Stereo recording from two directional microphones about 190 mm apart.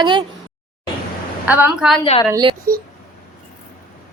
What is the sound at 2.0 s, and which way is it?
Speech, 30° left (ahead or behind).